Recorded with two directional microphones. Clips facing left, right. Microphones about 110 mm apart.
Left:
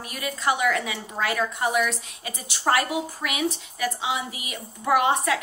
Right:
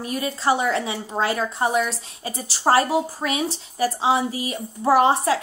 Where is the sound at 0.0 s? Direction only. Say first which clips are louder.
Right 4 dB; 30° right (ahead or behind).